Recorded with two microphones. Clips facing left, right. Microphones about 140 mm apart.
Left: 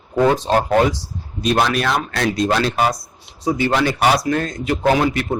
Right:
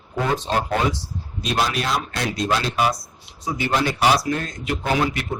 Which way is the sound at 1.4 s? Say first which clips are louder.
Left 5 dB; 55° left (ahead or behind).